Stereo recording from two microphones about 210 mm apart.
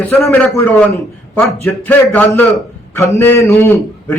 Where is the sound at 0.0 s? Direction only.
10° left (ahead or behind).